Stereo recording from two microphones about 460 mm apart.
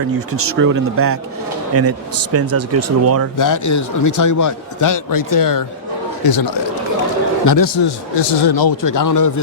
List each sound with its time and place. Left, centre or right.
0.3 s speech: right
3.3 s a man's voice: left
8.1 s a man's voice: left